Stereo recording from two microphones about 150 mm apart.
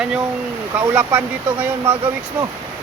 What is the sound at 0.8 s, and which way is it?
Speech, 10° right (ahead or behind).